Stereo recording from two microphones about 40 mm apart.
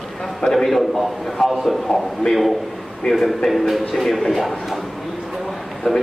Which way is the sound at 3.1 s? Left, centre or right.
Centre.